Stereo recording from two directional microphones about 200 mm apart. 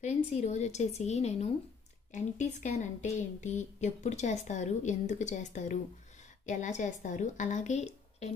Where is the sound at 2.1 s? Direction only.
35° left (ahead or behind).